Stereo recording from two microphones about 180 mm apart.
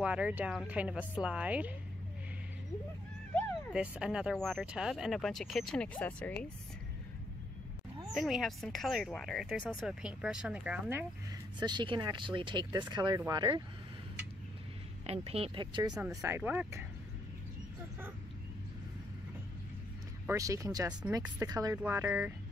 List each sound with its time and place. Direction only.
0.0 s a woman's voice: 5° right (ahead or behind)
3.7 s speech: 5° right (ahead or behind)
8.1 s speech: centre (ahead or behind)
11.6 s speech: 25° right (ahead or behind)
15.0 s speech: 35° right (ahead or behind)
16.1 s a woman's voice: 15° right (ahead or behind)
20.2 s a woman's voice: 15° right (ahead or behind)